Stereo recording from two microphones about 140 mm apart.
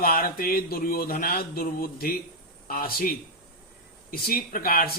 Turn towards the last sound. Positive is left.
turn(degrees=90)